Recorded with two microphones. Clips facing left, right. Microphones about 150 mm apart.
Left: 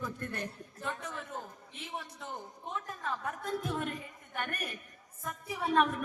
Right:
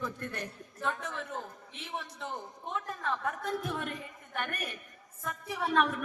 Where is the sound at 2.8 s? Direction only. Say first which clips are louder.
Right 4 dB; 60° right (ahead or behind).